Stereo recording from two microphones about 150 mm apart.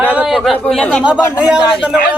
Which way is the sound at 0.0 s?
10° right (ahead or behind).